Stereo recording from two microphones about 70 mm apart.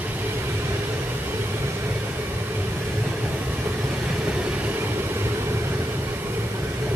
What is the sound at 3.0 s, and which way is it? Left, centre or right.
Train, centre.